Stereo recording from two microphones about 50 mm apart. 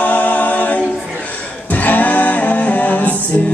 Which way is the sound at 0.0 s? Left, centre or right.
Left.